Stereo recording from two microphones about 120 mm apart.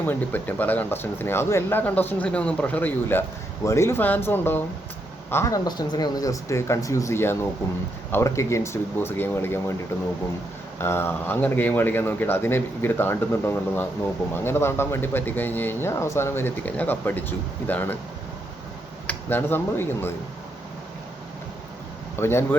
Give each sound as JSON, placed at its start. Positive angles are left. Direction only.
{"t": 0.0, "sound": "speech", "side_deg": 15}
{"t": 5.6, "sound": "speech", "side_deg": 35}
{"t": 10.8, "sound": "speech", "side_deg": 20}
{"t": 19.0, "sound": "speech", "side_deg": 15}
{"t": 22.1, "sound": "speech", "side_deg": 20}